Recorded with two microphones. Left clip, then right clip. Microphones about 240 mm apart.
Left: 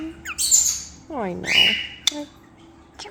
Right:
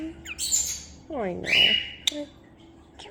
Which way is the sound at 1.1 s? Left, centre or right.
Left.